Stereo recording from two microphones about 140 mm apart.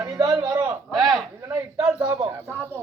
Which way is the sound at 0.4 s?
25° right (ahead or behind).